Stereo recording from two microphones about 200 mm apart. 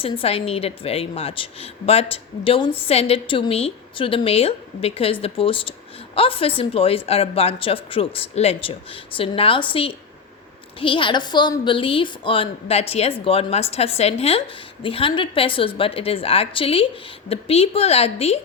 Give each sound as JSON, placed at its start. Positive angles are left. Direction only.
{"t": 0.0, "sound": "a woman's voice", "side_deg": 30}